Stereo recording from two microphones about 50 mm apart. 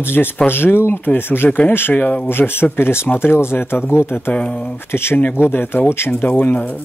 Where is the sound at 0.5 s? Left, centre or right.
Left.